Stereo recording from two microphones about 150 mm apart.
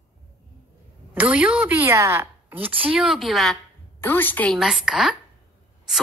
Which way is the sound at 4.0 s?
15° left (ahead or behind).